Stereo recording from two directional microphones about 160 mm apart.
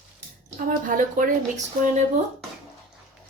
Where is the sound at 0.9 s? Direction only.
55° right (ahead or behind).